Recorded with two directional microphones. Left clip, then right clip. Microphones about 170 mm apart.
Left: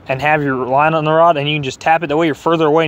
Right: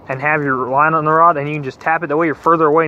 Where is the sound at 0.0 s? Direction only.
65° left (ahead or behind).